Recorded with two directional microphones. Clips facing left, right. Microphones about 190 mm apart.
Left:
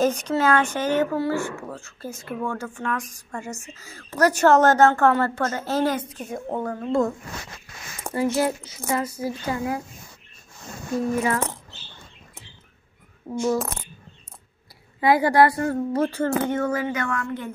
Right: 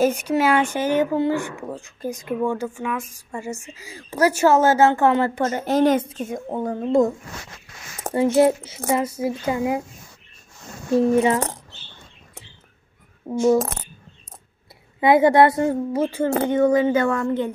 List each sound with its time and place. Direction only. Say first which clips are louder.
0.0 s a woman's voice: right 2 dB; 10° right (ahead or behind)
8.1 s a sound: right 5 dB; 45° right (ahead or behind)
8.6 s a woman's voice: right 4 dB; 25° right (ahead or behind)
11.0 s a woman's voice: right 6 dB; 25° right (ahead or behind)
13.3 s a woman's voice: right 6 dB; 25° right (ahead or behind)
15.0 s a woman's voice: right 3 dB; 20° right (ahead or behind)
15.9 s a woman's voice: right 1 dB; 10° right (ahead or behind); by 17.5 s 25° right (ahead or behind)